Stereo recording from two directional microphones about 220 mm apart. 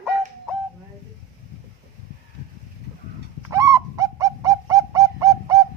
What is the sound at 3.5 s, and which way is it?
Bird, 15° right (ahead or behind).